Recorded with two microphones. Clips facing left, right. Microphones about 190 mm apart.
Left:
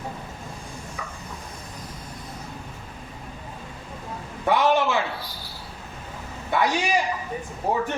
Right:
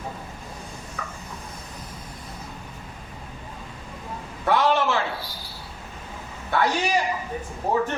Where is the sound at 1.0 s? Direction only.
10° left (ahead or behind).